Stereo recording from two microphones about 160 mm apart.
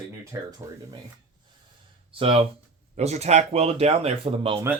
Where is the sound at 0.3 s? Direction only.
20° right (ahead or behind).